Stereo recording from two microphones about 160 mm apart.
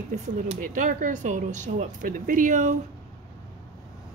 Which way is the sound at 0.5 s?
55° right (ahead or behind).